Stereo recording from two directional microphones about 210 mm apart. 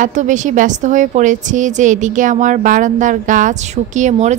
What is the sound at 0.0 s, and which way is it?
Speech, 35° right (ahead or behind).